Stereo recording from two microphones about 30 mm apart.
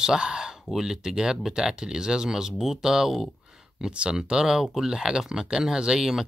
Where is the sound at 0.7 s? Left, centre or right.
Right.